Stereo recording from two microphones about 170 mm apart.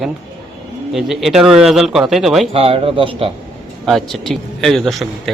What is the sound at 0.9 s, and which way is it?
A man's voice, centre (ahead or behind).